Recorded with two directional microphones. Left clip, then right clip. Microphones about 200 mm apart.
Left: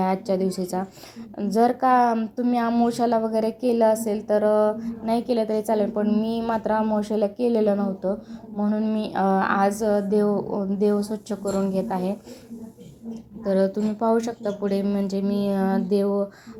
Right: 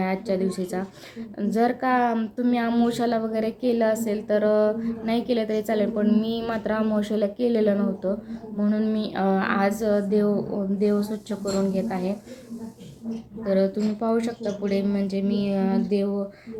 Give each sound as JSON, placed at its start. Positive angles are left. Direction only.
{"t": 0.0, "sound": "a woman's voice", "side_deg": 15}
{"t": 13.4, "sound": "a woman's voice", "side_deg": 15}